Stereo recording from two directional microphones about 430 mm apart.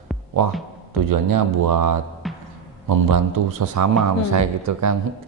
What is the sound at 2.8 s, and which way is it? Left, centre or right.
A man's voice, right.